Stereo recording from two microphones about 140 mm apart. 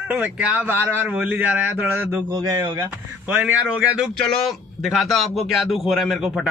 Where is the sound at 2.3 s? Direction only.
30° right (ahead or behind).